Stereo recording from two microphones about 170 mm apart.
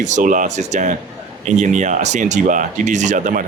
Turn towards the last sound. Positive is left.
turn(degrees=-50)  # may be behind; listen again after turning